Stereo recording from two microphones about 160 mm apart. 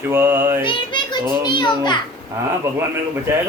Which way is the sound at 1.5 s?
30° left (ahead or behind).